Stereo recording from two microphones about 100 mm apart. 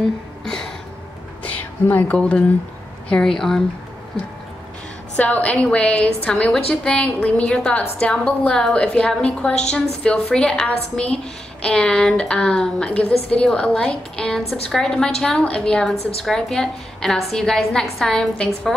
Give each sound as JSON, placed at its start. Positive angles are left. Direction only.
{"t": 1.4, "sound": "a sound", "side_deg": 15}
{"t": 2.1, "sound": "a woman's voice", "side_deg": 10}
{"t": 5.1, "sound": "a woman's voice", "side_deg": 15}